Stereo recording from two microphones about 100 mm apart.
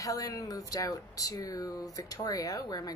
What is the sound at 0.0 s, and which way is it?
Speech, 35° left (ahead or behind).